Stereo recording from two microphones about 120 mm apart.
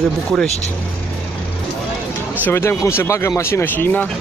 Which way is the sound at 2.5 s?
25° left (ahead or behind).